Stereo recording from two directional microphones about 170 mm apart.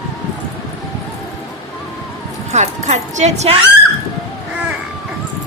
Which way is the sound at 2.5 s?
45° right (ahead or behind).